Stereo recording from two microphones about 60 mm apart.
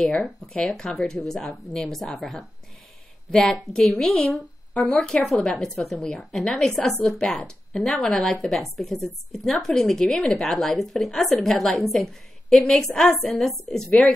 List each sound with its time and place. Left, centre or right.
0.7 s a woman's voice: centre
3.3 s a woman's voice: centre
8.4 s a woman's voice: centre